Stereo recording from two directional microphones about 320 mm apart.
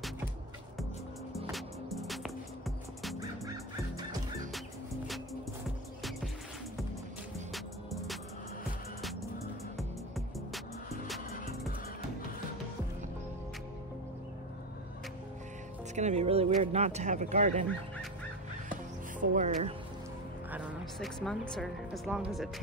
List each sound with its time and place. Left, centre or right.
1.3 s music: centre
5.0 s music: centre
7.5 s music: centre
9.8 s music: centre
15.9 s speech: right
19.3 s speech: right
20.5 s speech: centre